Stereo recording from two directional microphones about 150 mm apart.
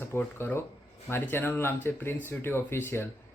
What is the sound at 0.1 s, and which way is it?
Speech, 15° left (ahead or behind).